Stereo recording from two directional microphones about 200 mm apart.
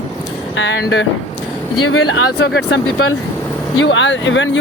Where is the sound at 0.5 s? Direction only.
65° left (ahead or behind).